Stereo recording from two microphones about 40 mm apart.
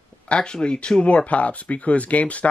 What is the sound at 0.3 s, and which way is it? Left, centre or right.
Speech, left.